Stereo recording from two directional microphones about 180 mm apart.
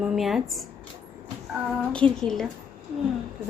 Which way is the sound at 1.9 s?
5° left (ahead or behind).